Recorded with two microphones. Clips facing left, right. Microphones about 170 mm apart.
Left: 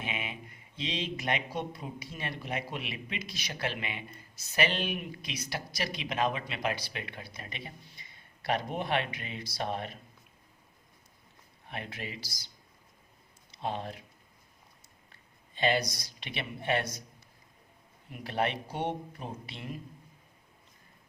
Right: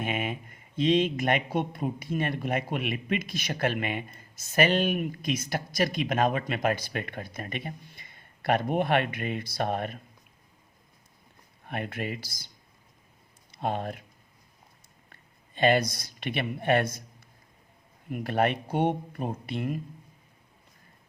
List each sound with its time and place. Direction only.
0.0 s speech: 50° right (ahead or behind)
11.7 s speech: 55° right (ahead or behind)
13.5 s speech: 55° right (ahead or behind)
15.1 s speech: 50° right (ahead or behind)